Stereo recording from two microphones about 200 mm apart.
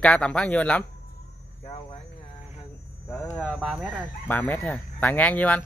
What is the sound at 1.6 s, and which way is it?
Speech, 30° left (ahead or behind).